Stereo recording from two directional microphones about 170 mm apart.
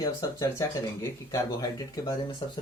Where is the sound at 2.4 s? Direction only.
30° left (ahead or behind).